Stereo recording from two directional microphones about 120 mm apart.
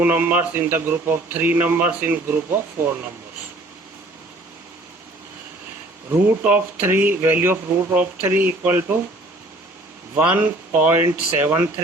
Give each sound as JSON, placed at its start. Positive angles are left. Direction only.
{"t": 0.0, "sound": "speech", "side_deg": -15}
{"t": 6.2, "sound": "speech", "side_deg": -15}
{"t": 10.2, "sound": "speech", "side_deg": -15}